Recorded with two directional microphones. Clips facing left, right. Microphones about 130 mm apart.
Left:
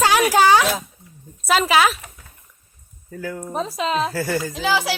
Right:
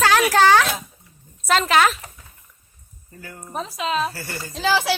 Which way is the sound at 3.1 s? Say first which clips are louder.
Left 10 dB; 90° left.